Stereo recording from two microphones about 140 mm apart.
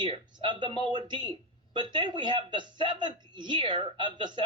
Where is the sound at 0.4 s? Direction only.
35° right (ahead or behind).